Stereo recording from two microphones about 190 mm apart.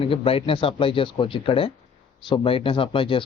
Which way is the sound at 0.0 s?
30° left (ahead or behind).